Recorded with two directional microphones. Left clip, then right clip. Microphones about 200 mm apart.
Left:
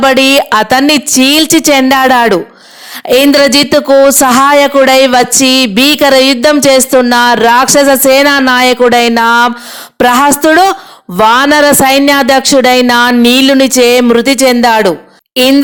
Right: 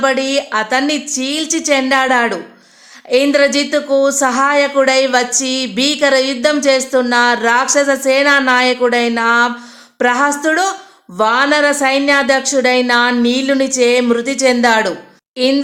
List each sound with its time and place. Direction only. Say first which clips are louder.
0.0 s speech: left 9 dB; 40° left (ahead or behind)